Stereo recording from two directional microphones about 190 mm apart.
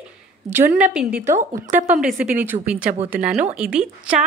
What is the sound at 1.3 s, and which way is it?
Speech, 40° right (ahead or behind).